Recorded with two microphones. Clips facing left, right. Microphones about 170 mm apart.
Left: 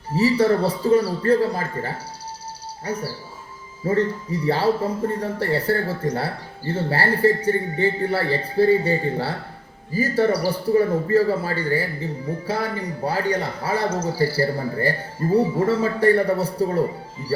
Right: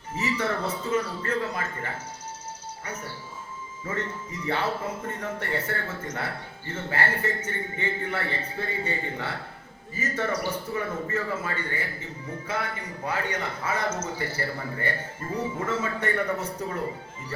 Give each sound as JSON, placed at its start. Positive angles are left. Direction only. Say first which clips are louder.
{"t": 0.1, "sound": "a man's voice", "louder": "left 10 dB", "side_deg": 35}